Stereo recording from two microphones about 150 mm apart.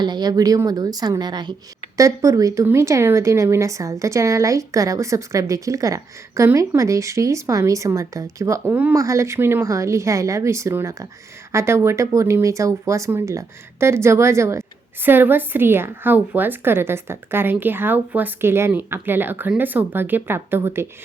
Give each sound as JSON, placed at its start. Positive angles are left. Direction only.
{"t": 0.0, "sound": "speech", "side_deg": -30}
{"t": 8.6, "sound": "a woman's voice", "side_deg": -10}
{"t": 9.0, "sound": "a woman's voice", "side_deg": -20}